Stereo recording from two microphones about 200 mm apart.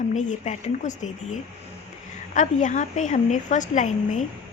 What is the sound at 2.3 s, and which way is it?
Speech, 40° left (ahead or behind).